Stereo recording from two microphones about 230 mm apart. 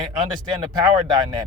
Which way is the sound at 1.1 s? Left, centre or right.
Centre.